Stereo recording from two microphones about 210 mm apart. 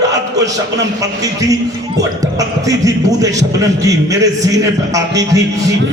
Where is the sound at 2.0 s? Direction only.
15° right (ahead or behind).